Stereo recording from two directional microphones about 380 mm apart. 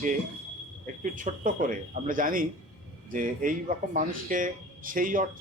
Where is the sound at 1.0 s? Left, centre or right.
Right.